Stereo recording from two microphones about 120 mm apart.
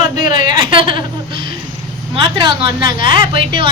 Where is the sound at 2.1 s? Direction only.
45° right (ahead or behind).